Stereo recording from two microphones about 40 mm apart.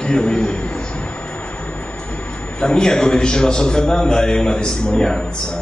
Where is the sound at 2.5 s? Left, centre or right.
Left.